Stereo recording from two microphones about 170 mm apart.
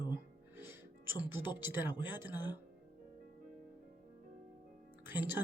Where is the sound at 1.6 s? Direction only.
10° right (ahead or behind).